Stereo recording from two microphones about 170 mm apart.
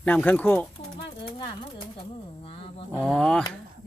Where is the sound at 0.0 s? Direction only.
10° left (ahead or behind).